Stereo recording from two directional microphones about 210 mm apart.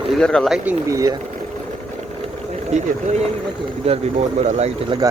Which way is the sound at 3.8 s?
30° right (ahead or behind).